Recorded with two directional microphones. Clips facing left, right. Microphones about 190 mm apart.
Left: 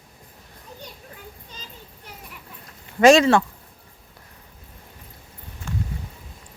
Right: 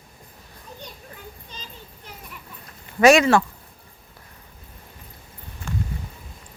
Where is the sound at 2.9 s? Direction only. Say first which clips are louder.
Left 1 dB; 25° left (ahead or behind).